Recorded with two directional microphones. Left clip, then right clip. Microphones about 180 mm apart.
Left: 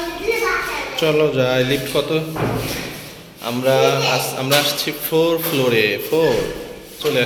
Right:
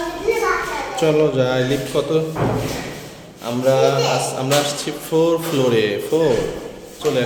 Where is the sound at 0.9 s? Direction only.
15° right (ahead or behind).